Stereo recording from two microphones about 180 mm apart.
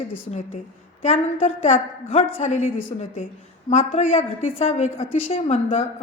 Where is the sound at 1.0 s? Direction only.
40° left (ahead or behind).